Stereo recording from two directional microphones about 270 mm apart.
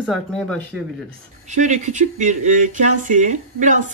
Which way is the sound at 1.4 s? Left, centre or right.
Right.